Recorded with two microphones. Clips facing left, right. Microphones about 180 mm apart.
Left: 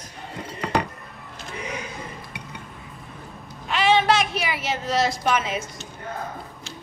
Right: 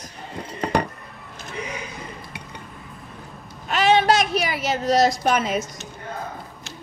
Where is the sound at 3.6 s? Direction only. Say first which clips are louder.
Right 2 dB; 45° right (ahead or behind).